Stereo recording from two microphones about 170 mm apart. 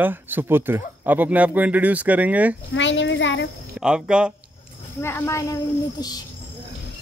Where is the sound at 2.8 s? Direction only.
90° left.